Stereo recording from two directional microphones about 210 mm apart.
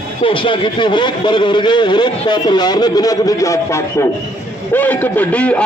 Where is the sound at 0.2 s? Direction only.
25° left (ahead or behind).